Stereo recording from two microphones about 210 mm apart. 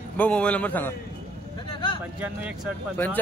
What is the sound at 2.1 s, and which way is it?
Speech, 5° right (ahead or behind).